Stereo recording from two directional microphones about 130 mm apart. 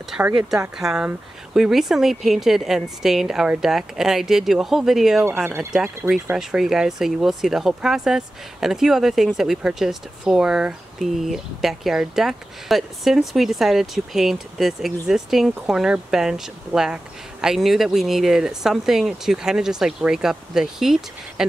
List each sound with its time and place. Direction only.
0.7 s speech: 5° right (ahead or behind)
5.2 s speech: 15° right (ahead or behind)
5.7 s speech: 5° right (ahead or behind)